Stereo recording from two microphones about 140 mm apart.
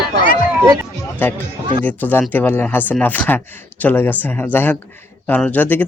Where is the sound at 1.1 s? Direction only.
15° left (ahead or behind).